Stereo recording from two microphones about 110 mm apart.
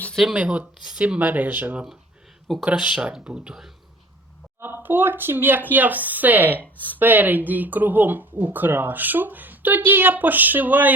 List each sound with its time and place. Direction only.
0.3 s speech: 10° right (ahead or behind)
4.6 s speech: 20° right (ahead or behind)